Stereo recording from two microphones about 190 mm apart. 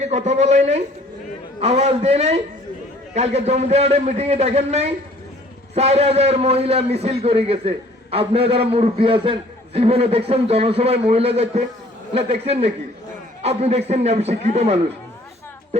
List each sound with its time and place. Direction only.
0.0 s a man's voice: 35° right (ahead or behind)